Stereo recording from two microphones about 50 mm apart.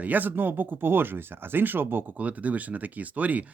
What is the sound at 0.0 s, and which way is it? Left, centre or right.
Speech, right.